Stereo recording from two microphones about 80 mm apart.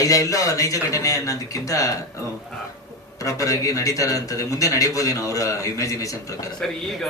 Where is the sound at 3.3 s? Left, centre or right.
Left.